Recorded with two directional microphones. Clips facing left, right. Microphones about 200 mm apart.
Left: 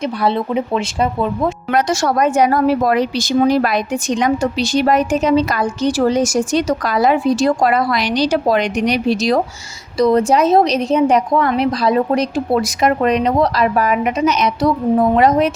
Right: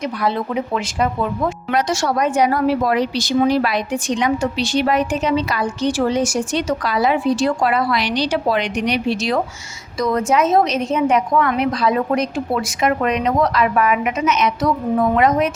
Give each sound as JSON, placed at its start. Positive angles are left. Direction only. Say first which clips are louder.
{"t": 0.2, "sound": "speech", "louder": "left 4 dB", "side_deg": 25}
{"t": 1.7, "sound": "a woman's voice", "louder": "left 3 dB", "side_deg": 45}